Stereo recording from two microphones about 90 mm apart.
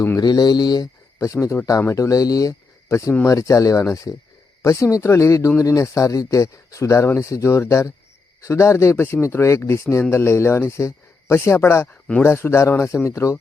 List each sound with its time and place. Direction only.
0.2 s a man's voice: 50° left (ahead or behind)